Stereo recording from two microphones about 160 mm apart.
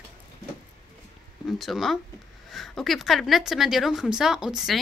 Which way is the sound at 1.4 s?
Centre (ahead or behind).